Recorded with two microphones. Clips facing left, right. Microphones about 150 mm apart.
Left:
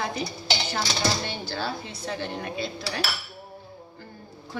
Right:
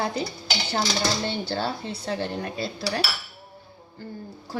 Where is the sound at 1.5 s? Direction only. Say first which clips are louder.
Right 3 dB; 30° right (ahead or behind).